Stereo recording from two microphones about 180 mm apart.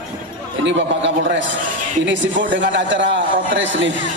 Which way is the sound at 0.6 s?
80° right.